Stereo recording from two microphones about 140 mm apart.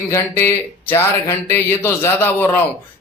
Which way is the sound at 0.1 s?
20° left (ahead or behind).